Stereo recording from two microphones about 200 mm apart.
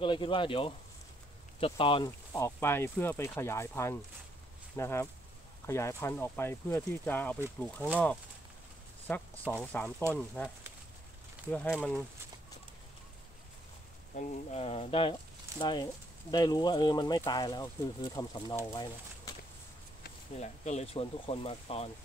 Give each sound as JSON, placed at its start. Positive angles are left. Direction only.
{"t": 0.0, "sound": "speech", "side_deg": 25}
{"t": 2.0, "sound": "speech", "side_deg": 15}
{"t": 9.0, "sound": "speech", "side_deg": 10}
{"t": 11.5, "sound": "speech", "side_deg": 5}
{"t": 14.1, "sound": "speech", "side_deg": 35}
{"t": 20.3, "sound": "speech", "side_deg": 35}